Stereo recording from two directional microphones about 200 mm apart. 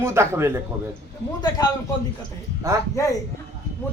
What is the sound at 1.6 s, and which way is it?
Speech, 20° left (ahead or behind).